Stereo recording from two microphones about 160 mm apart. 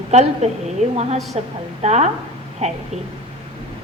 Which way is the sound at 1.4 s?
40° right (ahead or behind).